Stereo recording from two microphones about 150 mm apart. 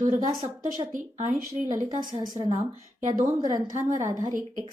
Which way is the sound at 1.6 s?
30° right (ahead or behind).